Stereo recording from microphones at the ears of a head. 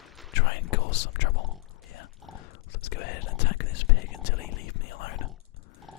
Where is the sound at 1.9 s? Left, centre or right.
Left.